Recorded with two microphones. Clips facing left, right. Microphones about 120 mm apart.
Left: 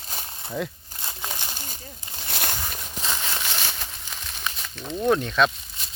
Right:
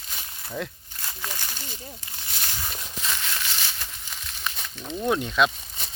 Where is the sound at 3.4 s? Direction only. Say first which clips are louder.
Left 3 dB; 55° left (ahead or behind).